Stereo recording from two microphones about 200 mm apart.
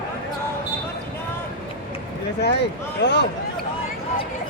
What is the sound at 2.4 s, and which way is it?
Speech, 55° left (ahead or behind).